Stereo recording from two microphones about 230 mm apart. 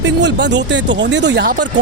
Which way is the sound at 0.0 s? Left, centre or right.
Right.